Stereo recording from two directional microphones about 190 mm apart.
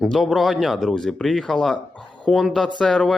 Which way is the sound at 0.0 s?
Centre (ahead or behind).